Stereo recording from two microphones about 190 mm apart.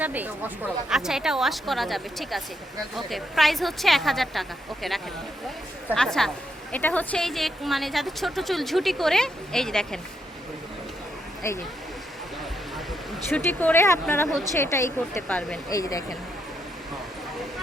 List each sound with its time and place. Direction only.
0.0 s a woman's voice: 10° right (ahead or behind)
11.4 s speech: 15° left (ahead or behind)
13.3 s speech: 10° left (ahead or behind)
15.7 s speech: 20° left (ahead or behind)